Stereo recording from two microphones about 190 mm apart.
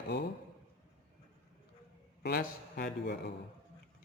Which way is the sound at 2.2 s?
55° left (ahead or behind).